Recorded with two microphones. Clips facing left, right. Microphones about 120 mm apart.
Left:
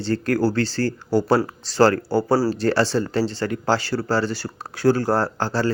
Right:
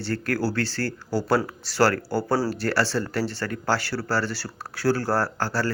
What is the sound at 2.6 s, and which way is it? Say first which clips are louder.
Speech: left 5 dB; 20° left (ahead or behind).